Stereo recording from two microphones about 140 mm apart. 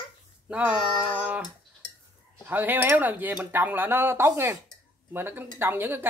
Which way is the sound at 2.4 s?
15° right (ahead or behind).